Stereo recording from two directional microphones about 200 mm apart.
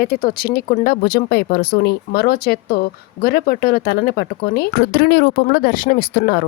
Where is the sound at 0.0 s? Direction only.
45° left (ahead or behind).